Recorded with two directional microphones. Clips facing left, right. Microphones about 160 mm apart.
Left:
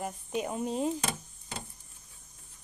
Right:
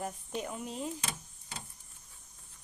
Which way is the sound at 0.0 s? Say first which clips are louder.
Left 4 dB; 10° left (ahead or behind).